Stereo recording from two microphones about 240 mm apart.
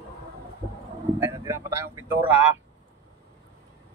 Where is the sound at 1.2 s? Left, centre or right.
Centre.